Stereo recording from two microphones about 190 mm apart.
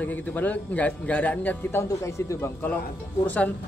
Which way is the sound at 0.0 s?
10° left (ahead or behind).